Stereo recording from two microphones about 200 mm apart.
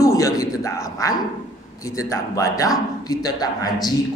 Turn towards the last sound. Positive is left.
turn(degrees=20)  # may be behind; listen again after turning